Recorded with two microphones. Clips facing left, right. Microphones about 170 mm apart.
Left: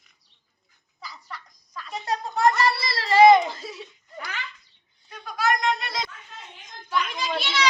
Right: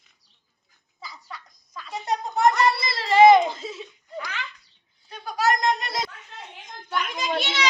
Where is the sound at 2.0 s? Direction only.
20° right (ahead or behind).